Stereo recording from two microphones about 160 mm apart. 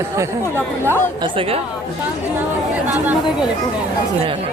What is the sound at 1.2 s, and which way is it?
Speech, 35° right (ahead or behind).